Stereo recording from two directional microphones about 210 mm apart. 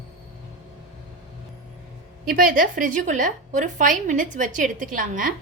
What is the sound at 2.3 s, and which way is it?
A woman's voice, 40° right (ahead or behind).